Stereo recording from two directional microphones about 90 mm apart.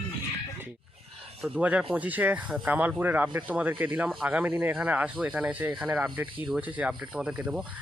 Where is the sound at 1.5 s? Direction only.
15° right (ahead or behind).